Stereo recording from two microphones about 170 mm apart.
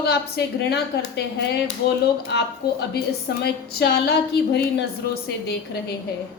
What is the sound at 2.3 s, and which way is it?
A woman's voice, 80° left.